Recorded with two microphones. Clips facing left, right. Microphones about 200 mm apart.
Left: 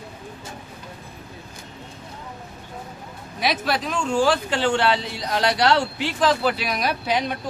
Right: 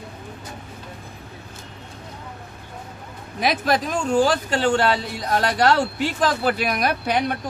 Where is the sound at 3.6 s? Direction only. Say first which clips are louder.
Right 3 dB; 45° right (ahead or behind).